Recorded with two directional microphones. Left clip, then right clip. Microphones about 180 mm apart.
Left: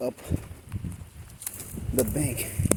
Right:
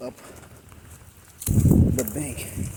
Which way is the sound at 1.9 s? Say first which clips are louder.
Left 2 dB; 40° left (ahead or behind).